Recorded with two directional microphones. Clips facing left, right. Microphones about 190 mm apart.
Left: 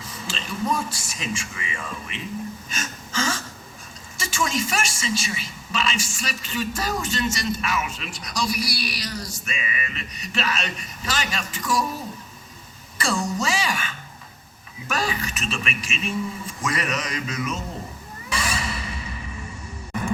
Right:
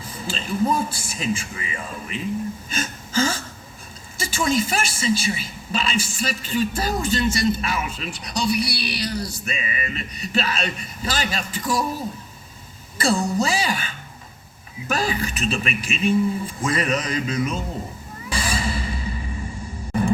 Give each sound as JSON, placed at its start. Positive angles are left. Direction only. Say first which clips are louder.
{"t": 0.2, "sound": "a woman's voice", "louder": "right 6 dB", "side_deg": -30}
{"t": 2.6, "sound": "a sound", "louder": "right 5 dB", "side_deg": -35}
{"t": 4.2, "sound": "a woman's voice", "louder": "right 4 dB", "side_deg": -35}
{"t": 13.0, "sound": "a woman's voice", "louder": "right 4 dB", "side_deg": -35}
{"t": 18.3, "sound": "music", "louder": "right 3 dB", "side_deg": -30}
{"t": 19.9, "sound": "a sound", "louder": "right 6 dB", "side_deg": -30}